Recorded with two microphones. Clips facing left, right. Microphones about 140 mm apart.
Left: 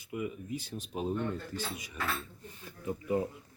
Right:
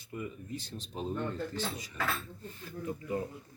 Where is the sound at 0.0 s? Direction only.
10° left (ahead or behind).